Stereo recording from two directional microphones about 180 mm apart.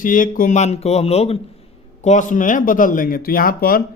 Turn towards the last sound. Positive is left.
turn(degrees=55)  # may be behind; listen again after turning